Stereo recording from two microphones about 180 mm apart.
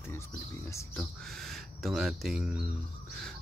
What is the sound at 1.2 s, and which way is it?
Speech, centre (ahead or behind).